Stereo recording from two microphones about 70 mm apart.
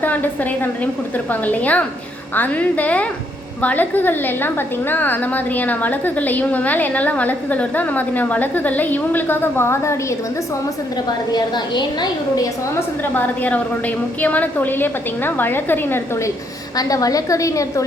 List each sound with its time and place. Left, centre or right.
0.0 s a woman's voice: left
11.3 s a woman's voice: left
13.1 s a woman's voice: left
16.7 s a woman's voice: left